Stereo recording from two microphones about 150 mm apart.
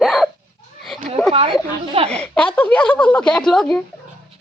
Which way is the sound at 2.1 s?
5° left (ahead or behind).